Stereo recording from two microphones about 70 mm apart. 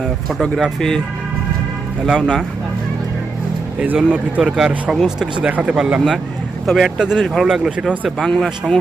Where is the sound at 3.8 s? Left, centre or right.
Right.